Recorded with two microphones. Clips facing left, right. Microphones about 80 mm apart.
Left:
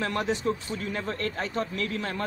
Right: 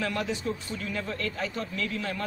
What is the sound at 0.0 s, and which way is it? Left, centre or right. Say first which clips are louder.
A man's voice: left 3 dB; left.